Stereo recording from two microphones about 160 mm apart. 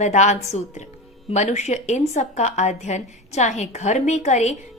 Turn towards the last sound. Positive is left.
turn(degrees=45)  # may be behind; listen again after turning